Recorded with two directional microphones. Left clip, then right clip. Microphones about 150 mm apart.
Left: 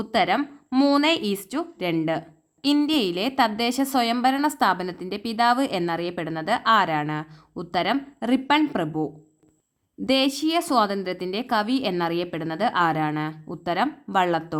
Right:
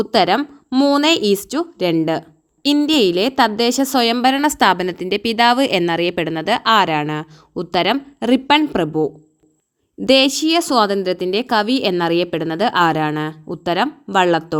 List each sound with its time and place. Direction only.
0.0 s a woman's voice: 40° right (ahead or behind)
0.7 s speech: 25° right (ahead or behind)
1.0 s a woman's voice: 40° right (ahead or behind)